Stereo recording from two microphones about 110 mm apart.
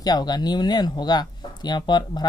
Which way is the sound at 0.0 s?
40° left (ahead or behind).